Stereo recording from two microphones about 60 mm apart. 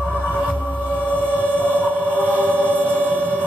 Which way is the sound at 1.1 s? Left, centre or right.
Left.